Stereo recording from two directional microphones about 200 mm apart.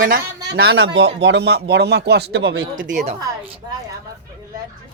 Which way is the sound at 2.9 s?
35° right (ahead or behind).